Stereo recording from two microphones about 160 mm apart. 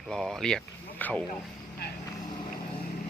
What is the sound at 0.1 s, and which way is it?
Speech, 5° left (ahead or behind).